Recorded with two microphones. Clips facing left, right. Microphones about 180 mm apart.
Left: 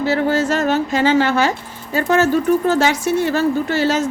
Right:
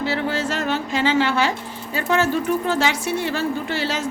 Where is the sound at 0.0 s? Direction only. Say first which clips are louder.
Left 6 dB; 45° left (ahead or behind).